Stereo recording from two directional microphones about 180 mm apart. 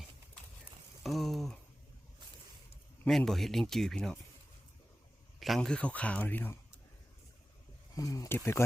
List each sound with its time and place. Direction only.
1.0 s speech: centre (ahead or behind)
3.0 s speech: 5° left (ahead or behind)
5.4 s speech: centre (ahead or behind)
7.9 s speech: 20° left (ahead or behind)